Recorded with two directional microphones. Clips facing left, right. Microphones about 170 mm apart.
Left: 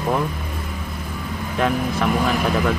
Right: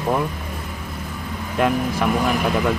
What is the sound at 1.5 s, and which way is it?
Speech, 10° right (ahead or behind).